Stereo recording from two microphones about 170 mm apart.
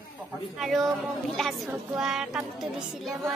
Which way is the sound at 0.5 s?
Centre (ahead or behind).